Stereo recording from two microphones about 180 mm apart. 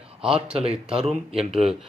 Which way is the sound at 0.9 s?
30° right (ahead or behind).